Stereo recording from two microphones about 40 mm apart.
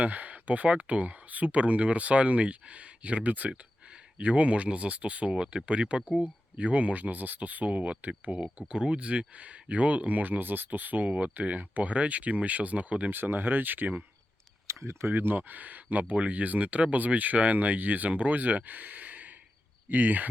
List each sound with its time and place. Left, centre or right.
0.0 s speech: right
5.3 s speech: right
8.5 s speech: right
13.1 s speech: right
15.0 s speech: right